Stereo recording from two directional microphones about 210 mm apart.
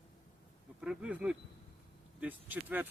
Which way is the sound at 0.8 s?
5° right (ahead or behind).